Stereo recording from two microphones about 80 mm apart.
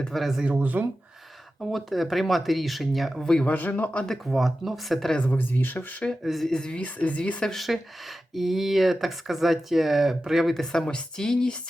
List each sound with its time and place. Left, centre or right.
0.1 s speech: centre
0.4 s speech: centre
1.7 s speech: centre
3.4 s speech: centre
4.1 s speech: centre
5.1 s speech: centre
6.2 s speech: centre
7.5 s speech: centre
10.6 s speech: centre